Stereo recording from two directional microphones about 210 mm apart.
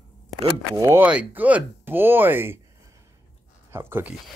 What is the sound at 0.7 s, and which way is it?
Speech, 10° right (ahead or behind).